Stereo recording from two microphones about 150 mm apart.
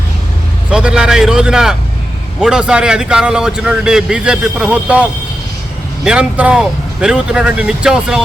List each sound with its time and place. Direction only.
0.7 s a man's voice: 5° right (ahead or behind)
6.1 s a man's voice: 10° right (ahead or behind)